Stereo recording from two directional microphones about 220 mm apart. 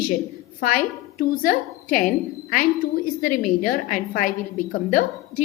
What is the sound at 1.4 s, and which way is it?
A woman's voice, 40° left (ahead or behind).